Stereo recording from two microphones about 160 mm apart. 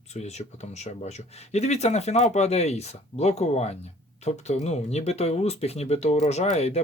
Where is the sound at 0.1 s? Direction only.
45° left (ahead or behind).